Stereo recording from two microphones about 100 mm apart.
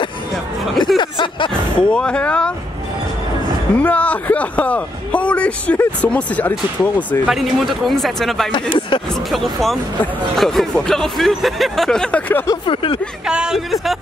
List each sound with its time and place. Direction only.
0.9 s a sound: 55° left (ahead or behind)
1.8 s speech: 10° left (ahead or behind)
3.7 s speech: 15° left (ahead or behind)
7.2 s speech: centre (ahead or behind)
8.5 s speech: 55° left (ahead or behind)
9.3 s speech: centre (ahead or behind)
12.6 s speech: 60° left (ahead or behind)
13.3 s speech: 5° right (ahead or behind)